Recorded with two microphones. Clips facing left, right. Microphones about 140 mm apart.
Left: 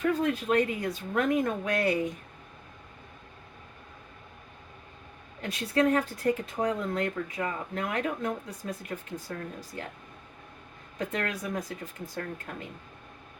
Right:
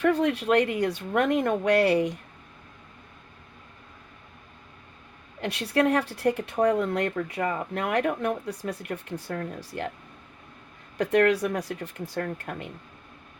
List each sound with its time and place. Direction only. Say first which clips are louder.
0.0 s speech: right 4 dB; 70° right (ahead or behind)
5.4 s speech: right 2 dB; 70° right (ahead or behind)
10.9 s speech: right 11 dB; 70° right (ahead or behind)